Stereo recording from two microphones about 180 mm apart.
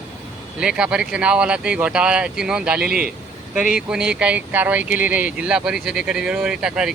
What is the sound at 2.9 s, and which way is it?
Speech, 55° right (ahead or behind).